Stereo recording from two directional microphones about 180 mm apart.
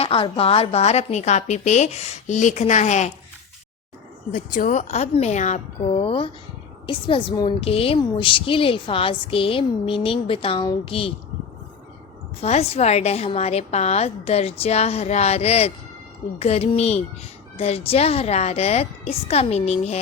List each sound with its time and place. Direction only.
0.0 s a woman's voice: 30° left (ahead or behind)
4.3 s a woman's voice: 45° left (ahead or behind); by 11.1 s 30° left (ahead or behind)
12.4 s a woman's voice: 35° left (ahead or behind)